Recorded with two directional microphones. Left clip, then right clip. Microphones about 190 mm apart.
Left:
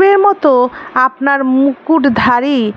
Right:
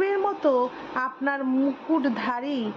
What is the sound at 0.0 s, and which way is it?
A woman's voice, 45° left (ahead or behind).